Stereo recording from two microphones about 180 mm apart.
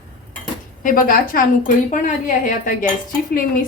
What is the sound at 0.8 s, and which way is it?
A woman's voice, 50° left (ahead or behind).